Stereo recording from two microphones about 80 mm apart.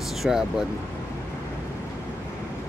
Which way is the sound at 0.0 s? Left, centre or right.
Centre.